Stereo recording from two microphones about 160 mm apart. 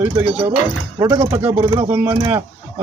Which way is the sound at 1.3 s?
15° right (ahead or behind).